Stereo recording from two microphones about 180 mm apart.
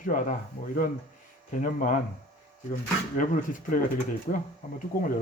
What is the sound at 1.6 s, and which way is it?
Speech, 50° left (ahead or behind).